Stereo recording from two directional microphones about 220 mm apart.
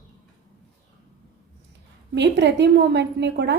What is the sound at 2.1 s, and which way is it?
A woman's voice, 50° right (ahead or behind).